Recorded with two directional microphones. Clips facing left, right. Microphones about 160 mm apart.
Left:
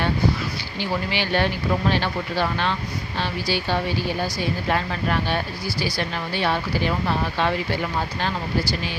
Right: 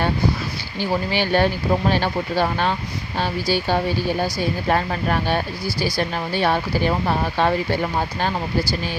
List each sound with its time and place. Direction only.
0.8 s speech: 45° right (ahead or behind)